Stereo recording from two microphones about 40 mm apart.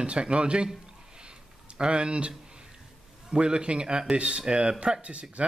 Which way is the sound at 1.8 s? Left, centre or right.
Right.